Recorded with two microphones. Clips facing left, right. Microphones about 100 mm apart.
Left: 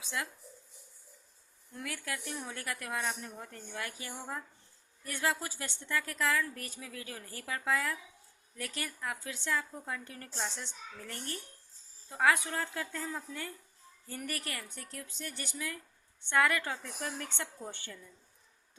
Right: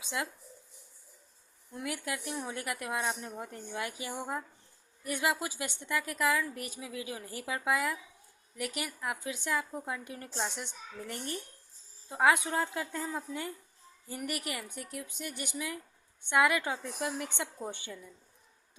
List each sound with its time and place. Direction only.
0.0 s speech: 20° right (ahead or behind)
1.7 s a woman's voice: 20° right (ahead or behind)